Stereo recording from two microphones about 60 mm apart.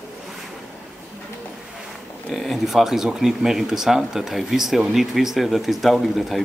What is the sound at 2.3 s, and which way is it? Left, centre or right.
Speech, centre.